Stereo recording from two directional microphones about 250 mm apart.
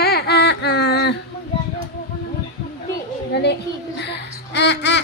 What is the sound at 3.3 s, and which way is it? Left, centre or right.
Babbling, left.